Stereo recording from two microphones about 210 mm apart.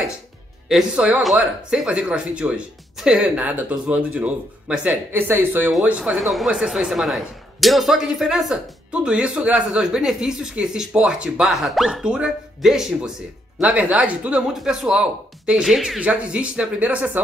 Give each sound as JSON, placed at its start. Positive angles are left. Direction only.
{"t": 0.7, "sound": "speech", "side_deg": -5}